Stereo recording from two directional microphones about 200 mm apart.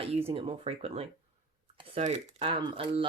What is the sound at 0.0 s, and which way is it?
Speech, 30° right (ahead or behind).